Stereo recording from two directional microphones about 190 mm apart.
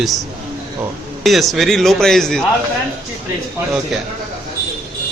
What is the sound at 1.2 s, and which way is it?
Speech, centre (ahead or behind).